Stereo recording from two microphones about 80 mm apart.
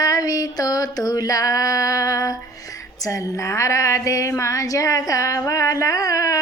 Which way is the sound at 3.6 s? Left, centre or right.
Left.